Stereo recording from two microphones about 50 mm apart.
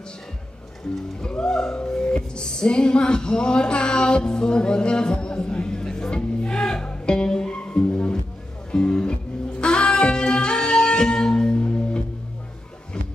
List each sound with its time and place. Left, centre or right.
1.3 s music: centre